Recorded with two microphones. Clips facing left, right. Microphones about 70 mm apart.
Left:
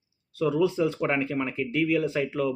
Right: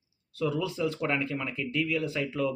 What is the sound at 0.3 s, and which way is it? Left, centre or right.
Speech, left.